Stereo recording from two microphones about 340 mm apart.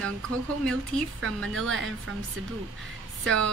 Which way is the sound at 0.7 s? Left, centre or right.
Right.